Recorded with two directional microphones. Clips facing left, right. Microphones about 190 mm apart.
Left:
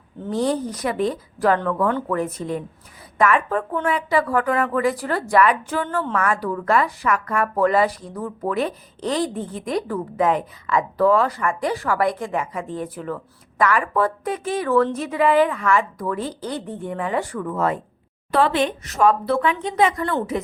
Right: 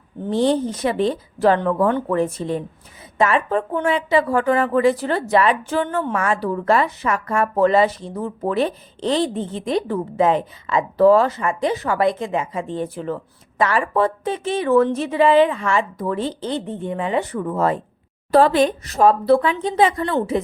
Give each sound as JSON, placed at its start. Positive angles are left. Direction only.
{"t": 0.3, "sound": "a woman's voice", "side_deg": -25}